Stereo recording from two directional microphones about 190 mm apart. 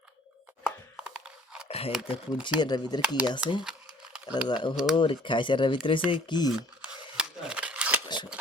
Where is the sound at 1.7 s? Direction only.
30° left (ahead or behind).